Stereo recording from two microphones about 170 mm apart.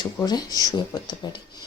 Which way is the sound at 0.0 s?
25° left (ahead or behind).